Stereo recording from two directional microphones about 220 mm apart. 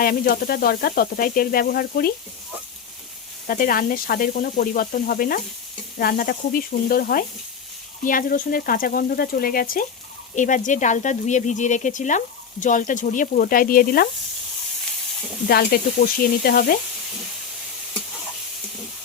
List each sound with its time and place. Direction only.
0.0 s sizzle: 40° left (ahead or behind)
3.4 s speech: 40° left (ahead or behind)
15.4 s sizzle: 45° left (ahead or behind)